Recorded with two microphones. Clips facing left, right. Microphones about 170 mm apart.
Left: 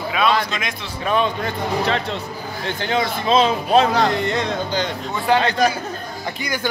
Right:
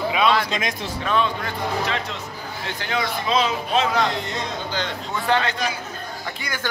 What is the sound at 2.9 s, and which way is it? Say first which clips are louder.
Speech: left 4 dB; 30° left (ahead or behind).